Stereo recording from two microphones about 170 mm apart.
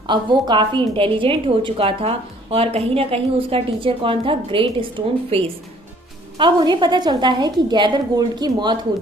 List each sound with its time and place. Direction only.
0.1 s a woman's voice: 25° right (ahead or behind)